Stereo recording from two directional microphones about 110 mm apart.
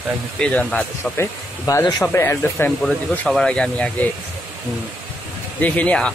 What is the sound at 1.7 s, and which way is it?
Speech, 30° left (ahead or behind).